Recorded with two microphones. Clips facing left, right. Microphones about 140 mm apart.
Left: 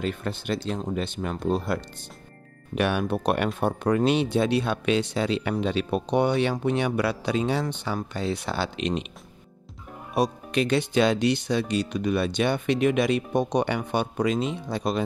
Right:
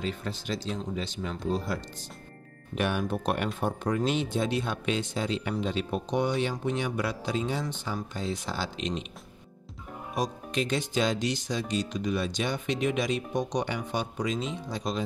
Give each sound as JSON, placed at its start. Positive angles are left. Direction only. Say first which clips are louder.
{"t": 0.0, "sound": "speech", "louder": "left 4 dB", "side_deg": 60}
{"t": 2.7, "sound": "speech", "louder": "left 4 dB", "side_deg": 75}
{"t": 10.1, "sound": "speech", "louder": "left 6 dB", "side_deg": 65}